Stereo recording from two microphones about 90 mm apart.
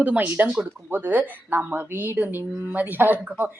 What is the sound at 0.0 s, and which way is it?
Speech, 15° right (ahead or behind).